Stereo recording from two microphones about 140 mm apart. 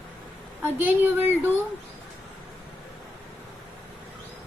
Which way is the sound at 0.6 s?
15° right (ahead or behind).